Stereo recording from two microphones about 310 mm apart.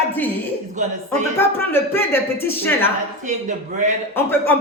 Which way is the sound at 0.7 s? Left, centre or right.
Right.